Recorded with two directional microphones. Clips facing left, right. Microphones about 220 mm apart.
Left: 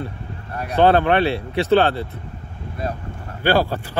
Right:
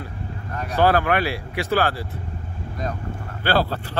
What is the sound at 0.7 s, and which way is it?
Speech, 25° left (ahead or behind).